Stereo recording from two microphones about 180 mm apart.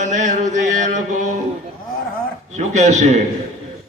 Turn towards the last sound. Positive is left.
turn(degrees=-40)  # may be behind; listen again after turning